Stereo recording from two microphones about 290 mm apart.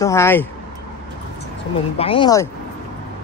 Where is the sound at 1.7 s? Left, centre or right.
Centre.